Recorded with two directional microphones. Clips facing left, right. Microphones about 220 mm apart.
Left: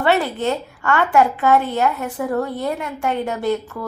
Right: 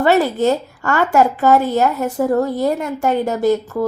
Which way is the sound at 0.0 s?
40° right (ahead or behind).